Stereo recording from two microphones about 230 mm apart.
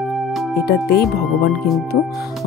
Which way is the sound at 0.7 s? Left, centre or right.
Left.